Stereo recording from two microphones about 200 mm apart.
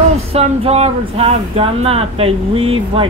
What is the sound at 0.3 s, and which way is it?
Speech, 30° right (ahead or behind).